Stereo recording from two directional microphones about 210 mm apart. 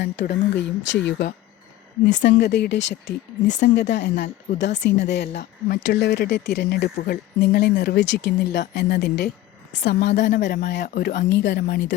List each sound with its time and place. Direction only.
0.0 s a woman's voice: 55° left (ahead or behind)